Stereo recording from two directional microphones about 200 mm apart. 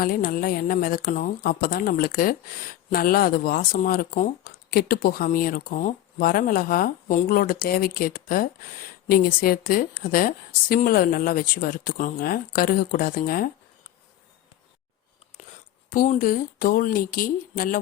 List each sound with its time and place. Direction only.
0.0 s speech: 45° left (ahead or behind)
15.9 s speech: 40° left (ahead or behind)